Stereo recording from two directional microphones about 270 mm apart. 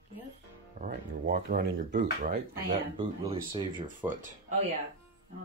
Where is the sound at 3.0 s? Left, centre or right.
Centre.